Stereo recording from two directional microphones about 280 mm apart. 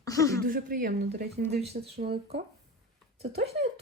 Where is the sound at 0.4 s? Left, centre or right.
Right.